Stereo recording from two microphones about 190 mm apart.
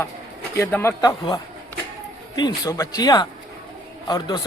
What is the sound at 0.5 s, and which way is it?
A man's voice, 15° left (ahead or behind).